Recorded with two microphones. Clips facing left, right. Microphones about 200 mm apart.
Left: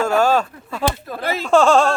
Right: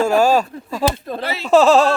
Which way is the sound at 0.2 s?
10° right (ahead or behind).